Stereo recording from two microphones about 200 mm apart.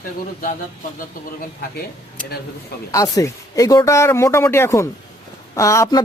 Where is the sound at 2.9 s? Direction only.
15° left (ahead or behind).